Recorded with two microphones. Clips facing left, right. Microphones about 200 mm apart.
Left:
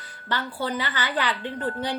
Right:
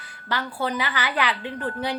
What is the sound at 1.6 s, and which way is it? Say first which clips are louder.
Speech: left 1 dB; 30° left (ahead or behind).